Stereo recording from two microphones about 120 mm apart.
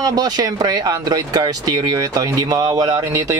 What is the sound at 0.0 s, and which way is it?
Speech, 30° right (ahead or behind).